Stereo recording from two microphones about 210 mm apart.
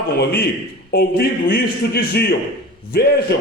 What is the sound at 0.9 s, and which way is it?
A man's voice, 45° left (ahead or behind).